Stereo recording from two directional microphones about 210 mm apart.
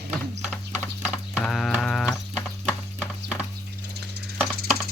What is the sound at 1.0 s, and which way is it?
Clip-clop, 5° left (ahead or behind).